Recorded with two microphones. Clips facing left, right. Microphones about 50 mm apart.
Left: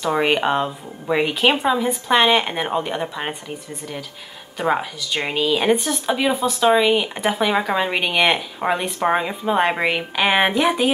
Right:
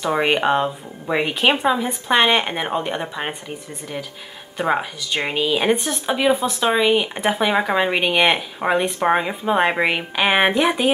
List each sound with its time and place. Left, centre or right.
0.2 s a woman's voice: centre